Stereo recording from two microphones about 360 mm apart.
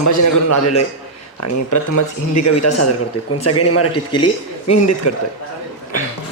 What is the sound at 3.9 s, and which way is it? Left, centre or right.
Speech, centre.